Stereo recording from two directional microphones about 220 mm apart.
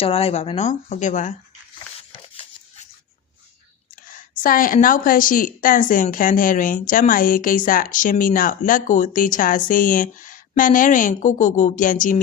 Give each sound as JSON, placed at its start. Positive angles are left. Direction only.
{"t": 0.0, "sound": "speech", "side_deg": 25}
{"t": 2.3, "sound": "a sound", "side_deg": 25}
{"t": 4.4, "sound": "a woman's voice", "side_deg": 40}